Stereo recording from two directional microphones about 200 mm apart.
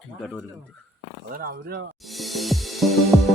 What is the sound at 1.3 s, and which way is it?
Speech, 50° right (ahead or behind).